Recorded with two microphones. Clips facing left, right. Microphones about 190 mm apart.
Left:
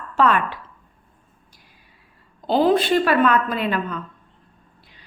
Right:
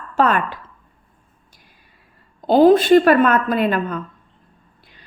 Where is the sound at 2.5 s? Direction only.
45° right (ahead or behind).